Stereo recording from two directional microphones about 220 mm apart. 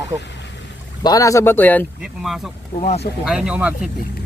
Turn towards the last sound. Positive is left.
turn(degrees=-5)  # may be behind; listen again after turning